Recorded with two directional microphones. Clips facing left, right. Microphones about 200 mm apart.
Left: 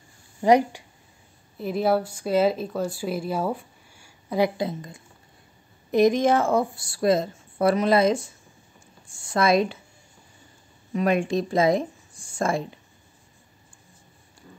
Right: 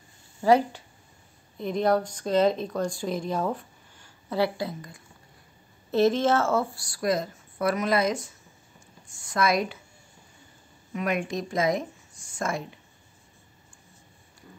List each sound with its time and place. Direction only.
0.4 s speech: 15° left (ahead or behind)
9.0 s a sound: 30° left (ahead or behind)
10.9 s speech: 30° left (ahead or behind)